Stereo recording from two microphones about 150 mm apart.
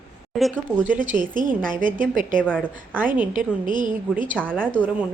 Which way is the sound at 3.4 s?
65° right (ahead or behind).